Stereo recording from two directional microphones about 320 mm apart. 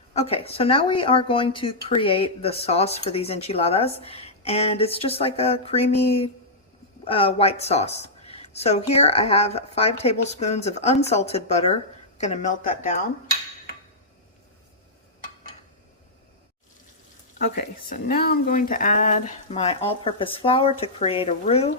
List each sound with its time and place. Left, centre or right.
0.1 s speech: centre
17.3 s speech: left